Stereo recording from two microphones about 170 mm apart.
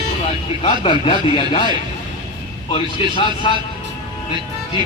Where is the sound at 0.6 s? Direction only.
30° left (ahead or behind).